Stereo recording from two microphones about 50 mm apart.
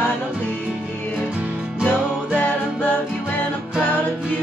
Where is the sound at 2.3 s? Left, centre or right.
Left.